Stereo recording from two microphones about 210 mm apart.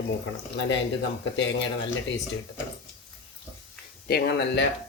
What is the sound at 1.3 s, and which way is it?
Speech, 60° left (ahead or behind).